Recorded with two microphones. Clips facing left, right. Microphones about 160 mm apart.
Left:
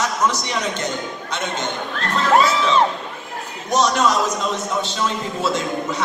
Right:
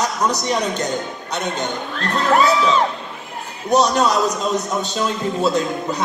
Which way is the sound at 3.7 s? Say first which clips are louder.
Right 2 dB; 35° right (ahead or behind).